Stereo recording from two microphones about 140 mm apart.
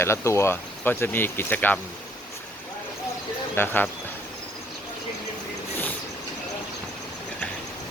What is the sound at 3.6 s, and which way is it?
Speech, 15° left (ahead or behind).